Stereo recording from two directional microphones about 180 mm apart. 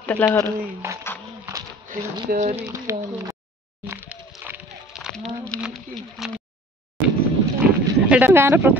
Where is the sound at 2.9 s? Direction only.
15° right (ahead or behind).